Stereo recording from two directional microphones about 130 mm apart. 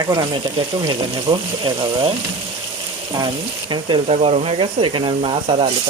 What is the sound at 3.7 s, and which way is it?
Speech, 35° right (ahead or behind).